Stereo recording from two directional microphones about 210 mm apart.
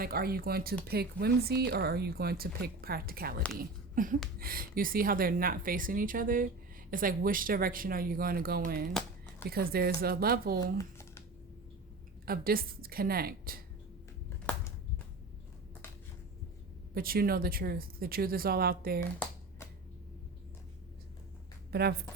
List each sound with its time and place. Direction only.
0.0 s speech: 45° right (ahead or behind)
10.8 s computer keyboard: 10° left (ahead or behind)
12.2 s speech: 45° right (ahead or behind)
16.9 s speech: 45° right (ahead or behind)
21.7 s a woman's voice: 50° right (ahead or behind)